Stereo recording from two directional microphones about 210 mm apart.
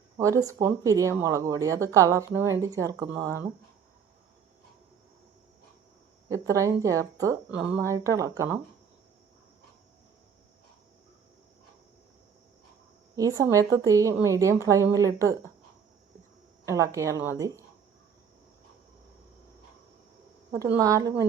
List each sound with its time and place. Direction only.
0.2 s speech: 15° right (ahead or behind)
6.2 s speech: 15° right (ahead or behind)
13.1 s speech: 15° right (ahead or behind)
16.6 s speech: 15° right (ahead or behind)
20.7 s speech: 15° right (ahead or behind)